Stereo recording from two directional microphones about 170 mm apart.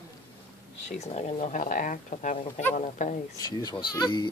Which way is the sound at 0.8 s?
40° left (ahead or behind).